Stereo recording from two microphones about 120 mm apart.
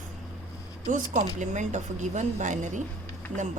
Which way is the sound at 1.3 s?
85° right.